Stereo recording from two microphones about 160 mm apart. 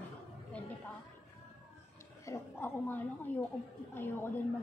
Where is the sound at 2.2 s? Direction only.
15° left (ahead or behind).